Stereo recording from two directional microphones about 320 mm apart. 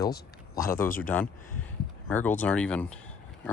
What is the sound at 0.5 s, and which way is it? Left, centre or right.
Speech, centre.